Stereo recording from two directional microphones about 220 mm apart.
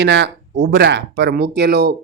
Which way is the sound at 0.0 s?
55° right (ahead or behind).